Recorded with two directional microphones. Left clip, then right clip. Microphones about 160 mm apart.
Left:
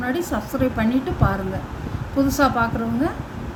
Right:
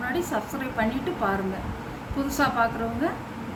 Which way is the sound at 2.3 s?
55° left (ahead or behind).